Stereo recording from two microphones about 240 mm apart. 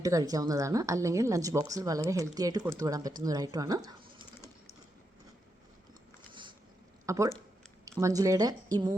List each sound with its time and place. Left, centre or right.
0.0 s a woman's voice: centre
7.0 s a sound: centre
7.9 s a woman's voice: centre